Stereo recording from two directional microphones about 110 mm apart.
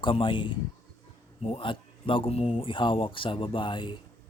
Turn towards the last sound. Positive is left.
turn(degrees=50)  # may be behind; listen again after turning